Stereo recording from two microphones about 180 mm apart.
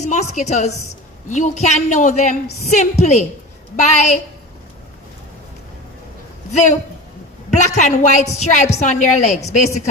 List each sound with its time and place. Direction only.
0.0 s a woman's voice: 40° left (ahead or behind)
6.5 s a woman's voice: 40° left (ahead or behind)